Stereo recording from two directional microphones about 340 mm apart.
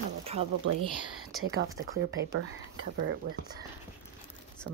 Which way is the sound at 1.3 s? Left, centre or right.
Right.